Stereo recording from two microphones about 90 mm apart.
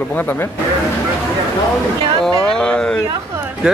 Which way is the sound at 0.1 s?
20° left (ahead or behind).